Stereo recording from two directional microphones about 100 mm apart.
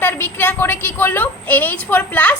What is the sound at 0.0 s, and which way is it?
A woman's voice, 20° left (ahead or behind).